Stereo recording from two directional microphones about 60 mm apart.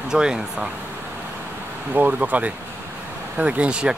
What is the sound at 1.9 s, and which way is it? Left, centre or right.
Speech, right.